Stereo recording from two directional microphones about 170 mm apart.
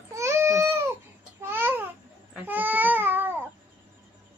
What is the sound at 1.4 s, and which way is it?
Babbling, 15° right (ahead or behind).